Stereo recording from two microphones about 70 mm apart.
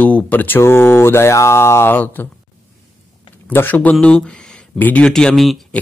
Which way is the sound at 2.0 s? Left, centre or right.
Left.